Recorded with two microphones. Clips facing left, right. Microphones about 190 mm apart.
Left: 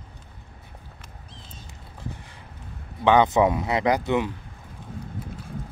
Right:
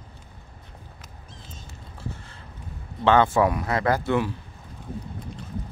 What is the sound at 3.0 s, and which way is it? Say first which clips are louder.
Speech: left 1 dB; 15° left (ahead or behind).